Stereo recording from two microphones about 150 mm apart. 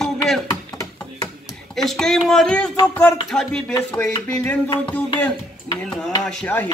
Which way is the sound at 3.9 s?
10° left (ahead or behind).